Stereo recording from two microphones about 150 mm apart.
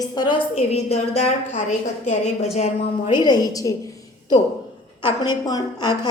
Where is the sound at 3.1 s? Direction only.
30° left (ahead or behind).